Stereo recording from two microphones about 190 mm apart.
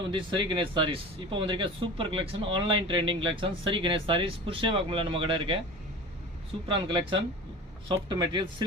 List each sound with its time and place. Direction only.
0.1 s speech: 25° right (ahead or behind)
6.7 s speech: 25° right (ahead or behind)